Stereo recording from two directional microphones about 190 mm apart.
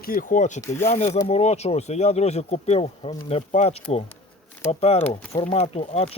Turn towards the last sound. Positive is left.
turn(degrees=35)  # may be behind; listen again after turning